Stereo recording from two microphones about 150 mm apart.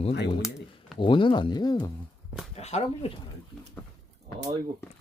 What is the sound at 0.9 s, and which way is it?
Speech, 35° left (ahead or behind).